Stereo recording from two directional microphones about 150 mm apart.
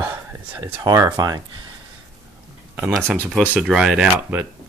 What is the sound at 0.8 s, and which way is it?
Speech, 25° right (ahead or behind).